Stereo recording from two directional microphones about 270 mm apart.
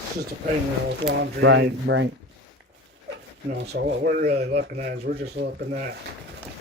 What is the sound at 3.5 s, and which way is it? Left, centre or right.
Speech, right.